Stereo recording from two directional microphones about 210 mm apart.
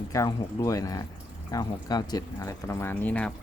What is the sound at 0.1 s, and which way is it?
Speech, 15° left (ahead or behind).